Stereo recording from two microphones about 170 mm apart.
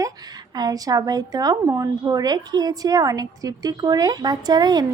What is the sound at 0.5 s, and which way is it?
A woman's voice, 20° right (ahead or behind).